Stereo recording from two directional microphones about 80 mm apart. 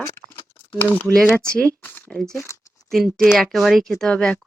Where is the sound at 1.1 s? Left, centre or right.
Centre.